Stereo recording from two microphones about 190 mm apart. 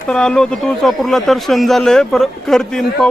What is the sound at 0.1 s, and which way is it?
Speech, 5° left (ahead or behind).